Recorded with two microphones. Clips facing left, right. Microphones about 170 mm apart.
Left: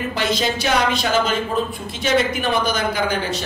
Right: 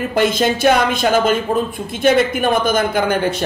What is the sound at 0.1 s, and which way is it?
Speech, 50° right (ahead or behind).